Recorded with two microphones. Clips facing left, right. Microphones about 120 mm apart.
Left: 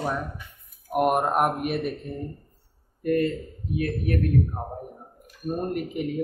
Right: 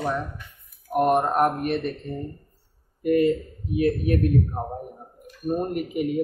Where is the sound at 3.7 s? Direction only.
25° right (ahead or behind).